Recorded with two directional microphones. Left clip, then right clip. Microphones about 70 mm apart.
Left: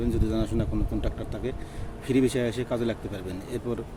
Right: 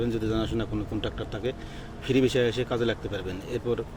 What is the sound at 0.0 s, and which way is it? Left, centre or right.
Speech, left.